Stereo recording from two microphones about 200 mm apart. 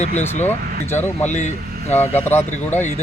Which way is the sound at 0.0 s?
35° left (ahead or behind).